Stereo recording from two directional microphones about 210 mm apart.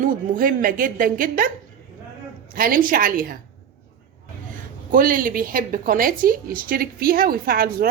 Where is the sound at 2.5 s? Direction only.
45° right (ahead or behind).